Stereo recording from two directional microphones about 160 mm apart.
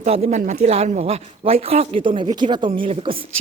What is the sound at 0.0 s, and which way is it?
Speech, 45° right (ahead or behind).